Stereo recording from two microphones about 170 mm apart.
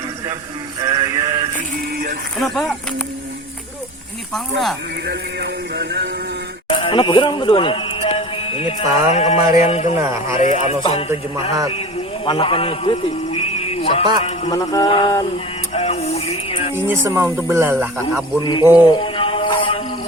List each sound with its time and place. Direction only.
0.9 s male singing: 20° right (ahead or behind)
2.4 s speech: centre (ahead or behind)
5.0 s speech: 75° right (ahead or behind)
6.7 s speech: 30° left (ahead or behind)
10.0 s speech: 15° right (ahead or behind)
10.4 s speech: 45° left (ahead or behind)
12.2 s a man's voice: 30° left (ahead or behind)
14.5 s music: 20° left (ahead or behind)
14.8 s speech: 30° left (ahead or behind)
15.7 s music: 40° left (ahead or behind)
16.7 s speech: 15° right (ahead or behind)
19.0 s music: 30° left (ahead or behind)